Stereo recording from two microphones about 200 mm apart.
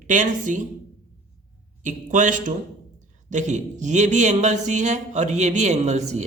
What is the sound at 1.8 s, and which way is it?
A man's voice, 40° right (ahead or behind).